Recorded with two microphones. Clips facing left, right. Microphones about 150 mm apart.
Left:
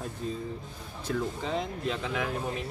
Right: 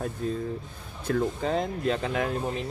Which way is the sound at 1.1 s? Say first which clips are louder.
Right 5 dB; 50° right (ahead or behind).